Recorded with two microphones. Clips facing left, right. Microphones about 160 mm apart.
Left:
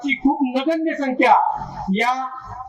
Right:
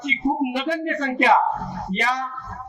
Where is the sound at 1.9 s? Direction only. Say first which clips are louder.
Left 5 dB; 35° left (ahead or behind).